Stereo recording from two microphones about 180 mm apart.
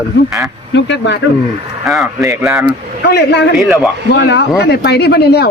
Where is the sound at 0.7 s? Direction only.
80° left.